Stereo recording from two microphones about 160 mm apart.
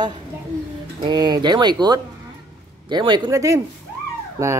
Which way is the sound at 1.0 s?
25° right (ahead or behind).